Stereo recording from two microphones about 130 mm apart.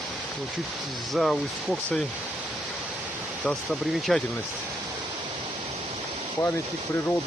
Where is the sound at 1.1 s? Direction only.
Centre (ahead or behind).